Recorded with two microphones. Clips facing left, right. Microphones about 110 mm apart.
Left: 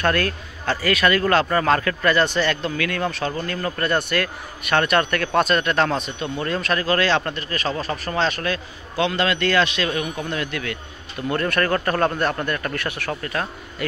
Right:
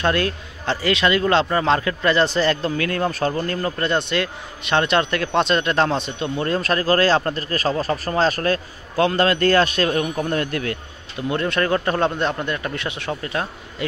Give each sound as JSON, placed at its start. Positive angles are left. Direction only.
{"t": 0.0, "sound": "a man's voice", "side_deg": -20}
{"t": 11.2, "sound": "a man's voice", "side_deg": -20}